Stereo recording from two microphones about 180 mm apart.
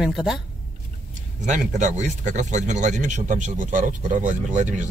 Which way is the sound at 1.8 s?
40° right (ahead or behind).